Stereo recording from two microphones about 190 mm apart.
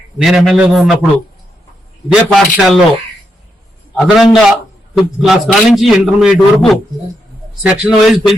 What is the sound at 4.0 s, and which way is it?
A man's voice, centre (ahead or behind).